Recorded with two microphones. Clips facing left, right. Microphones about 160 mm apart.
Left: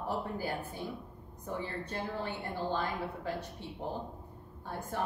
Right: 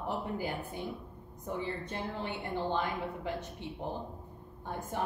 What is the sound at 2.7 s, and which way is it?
A woman's voice, 20° right (ahead or behind).